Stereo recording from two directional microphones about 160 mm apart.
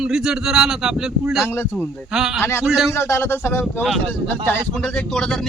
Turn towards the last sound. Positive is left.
turn(degrees=5)  # may be behind; listen again after turning